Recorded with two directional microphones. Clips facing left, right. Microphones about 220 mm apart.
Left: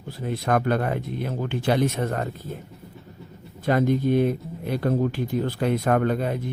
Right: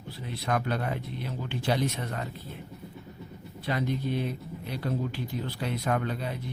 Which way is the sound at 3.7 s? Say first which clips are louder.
Left 9 dB; 50° left (ahead or behind).